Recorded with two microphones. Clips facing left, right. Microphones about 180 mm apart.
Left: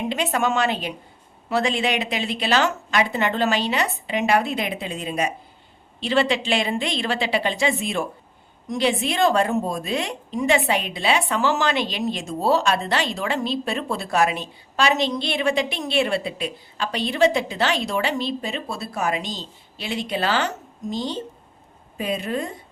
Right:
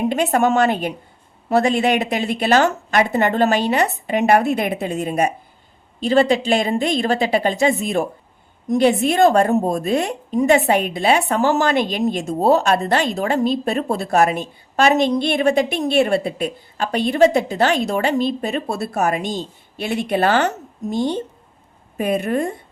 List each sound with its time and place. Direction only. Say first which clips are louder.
0.0 s a woman's voice: right 6 dB; 50° right (ahead or behind)